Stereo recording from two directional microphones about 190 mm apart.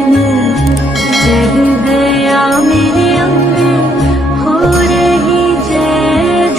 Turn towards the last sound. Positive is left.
turn(degrees=0)  # may be behind; listen again after turning